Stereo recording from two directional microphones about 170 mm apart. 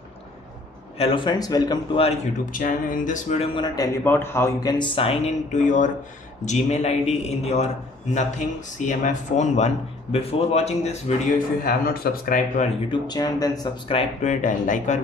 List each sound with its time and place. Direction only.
0.9 s speech: 30° left (ahead or behind)
2.5 s a man's voice: 50° left (ahead or behind); by 3.9 s 25° left (ahead or behind)
4.0 s a man's voice: 10° left (ahead or behind); by 11.4 s 40° left (ahead or behind)
11.6 s a man's voice: 60° left (ahead or behind)
12.9 s speech: 25° left (ahead or behind)
13.9 s speech: 45° left (ahead or behind)